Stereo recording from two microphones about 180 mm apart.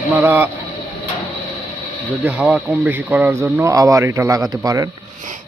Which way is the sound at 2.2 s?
5° right (ahead or behind).